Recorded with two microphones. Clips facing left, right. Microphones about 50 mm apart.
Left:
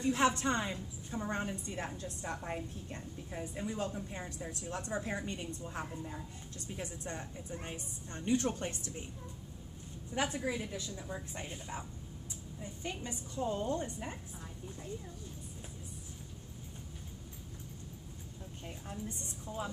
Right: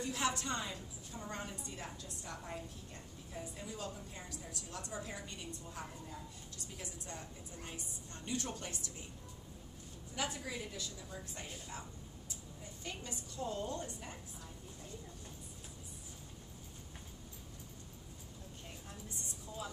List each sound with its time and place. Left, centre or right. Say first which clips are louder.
0.0 s a woman's voice: left 7 dB; left
10.1 s a woman's voice: left 6 dB; left
12.8 s a woman's voice: left 4 dB; left
18.9 s a woman's voice: left 8 dB; left